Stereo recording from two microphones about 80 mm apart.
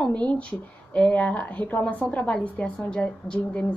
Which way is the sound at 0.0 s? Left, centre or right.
Centre.